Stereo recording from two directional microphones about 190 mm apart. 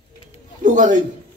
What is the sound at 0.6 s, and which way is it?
Speech, 40° right (ahead or behind).